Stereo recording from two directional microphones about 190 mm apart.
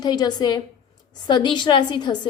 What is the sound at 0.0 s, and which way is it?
A woman's voice, 20° left (ahead or behind).